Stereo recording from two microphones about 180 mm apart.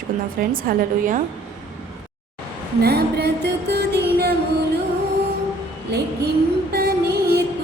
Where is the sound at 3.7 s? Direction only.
65° right (ahead or behind).